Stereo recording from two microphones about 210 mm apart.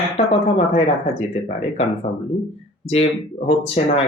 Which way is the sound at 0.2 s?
30° left (ahead or behind).